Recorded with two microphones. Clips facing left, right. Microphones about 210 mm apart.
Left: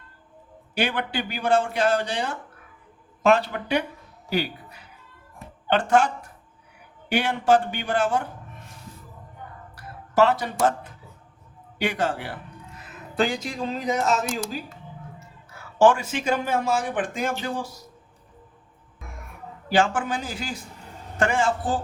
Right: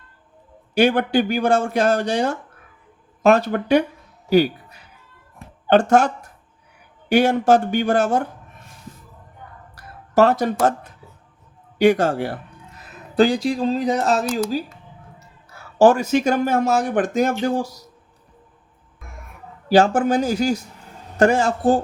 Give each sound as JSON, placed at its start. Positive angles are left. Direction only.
{"t": 0.7, "sound": "speech", "side_deg": -45}
{"t": 5.6, "sound": "speech", "side_deg": -40}
{"t": 7.1, "sound": "speech", "side_deg": -40}
{"t": 10.2, "sound": "speech", "side_deg": -45}
{"t": 11.8, "sound": "speech", "side_deg": -40}
{"t": 19.6, "sound": "speech", "side_deg": -40}